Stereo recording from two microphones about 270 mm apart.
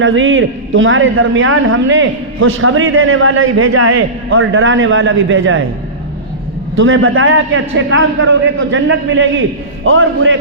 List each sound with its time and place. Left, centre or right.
0.0 s a man's voice: right
6.7 s a man's voice: right